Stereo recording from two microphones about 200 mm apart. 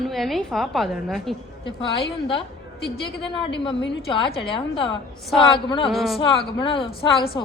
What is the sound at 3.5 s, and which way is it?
A woman's voice, 25° left (ahead or behind).